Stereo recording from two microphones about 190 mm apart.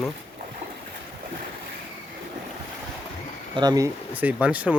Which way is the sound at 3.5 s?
20° right (ahead or behind).